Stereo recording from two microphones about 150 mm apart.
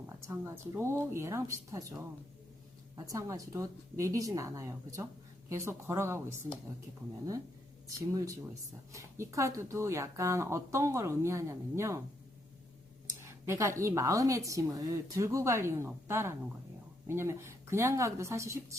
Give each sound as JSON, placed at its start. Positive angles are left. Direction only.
{"t": 0.3, "sound": "speech", "side_deg": -15}
{"t": 7.9, "sound": "speech", "side_deg": -20}
{"t": 13.1, "sound": "speech", "side_deg": -20}